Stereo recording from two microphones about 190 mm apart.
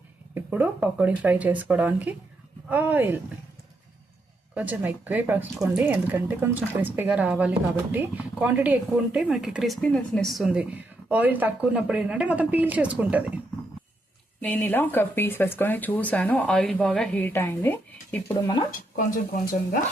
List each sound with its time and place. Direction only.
0.3 s speech: 10° right (ahead or behind)
4.5 s a woman's voice: 10° right (ahead or behind)
14.4 s speech: 10° left (ahead or behind)
18.9 s speech: 45° left (ahead or behind)